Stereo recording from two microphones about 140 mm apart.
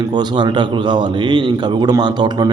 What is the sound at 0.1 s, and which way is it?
A man's voice, 30° right (ahead or behind).